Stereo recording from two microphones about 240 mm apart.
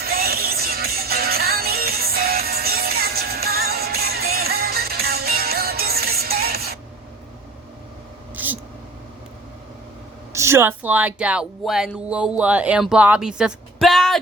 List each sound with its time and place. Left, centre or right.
0.0 s music: right
8.4 s a sound: centre
10.3 s speech: centre